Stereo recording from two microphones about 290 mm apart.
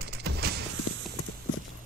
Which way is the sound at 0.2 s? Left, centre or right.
Right.